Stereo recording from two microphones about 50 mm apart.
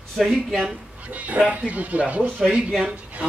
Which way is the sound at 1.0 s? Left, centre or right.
Right.